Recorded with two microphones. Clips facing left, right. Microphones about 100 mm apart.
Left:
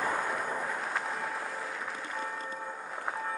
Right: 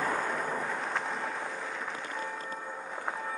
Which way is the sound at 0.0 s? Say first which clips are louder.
Right 1 dB; 5° left (ahead or behind).